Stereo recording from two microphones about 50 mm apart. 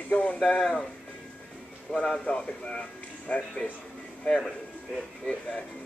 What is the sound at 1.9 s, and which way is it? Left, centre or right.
Speech, centre.